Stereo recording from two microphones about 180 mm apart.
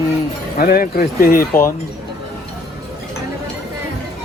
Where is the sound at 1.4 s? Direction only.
15° left (ahead or behind).